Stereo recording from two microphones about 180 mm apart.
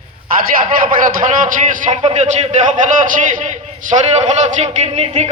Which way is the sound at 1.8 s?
40° right (ahead or behind).